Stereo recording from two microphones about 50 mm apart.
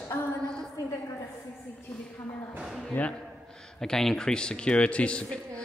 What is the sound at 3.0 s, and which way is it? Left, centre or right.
Speech, left.